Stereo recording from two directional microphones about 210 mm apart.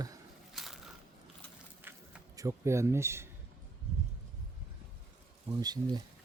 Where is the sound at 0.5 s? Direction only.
Centre (ahead or behind).